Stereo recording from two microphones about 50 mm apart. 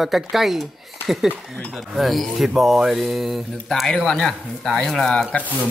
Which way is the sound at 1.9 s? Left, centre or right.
Centre.